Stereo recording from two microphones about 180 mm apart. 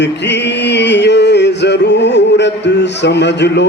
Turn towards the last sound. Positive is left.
turn(degrees=70)  # may be behind; listen again after turning